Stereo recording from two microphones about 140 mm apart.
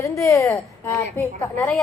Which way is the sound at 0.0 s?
20° left (ahead or behind).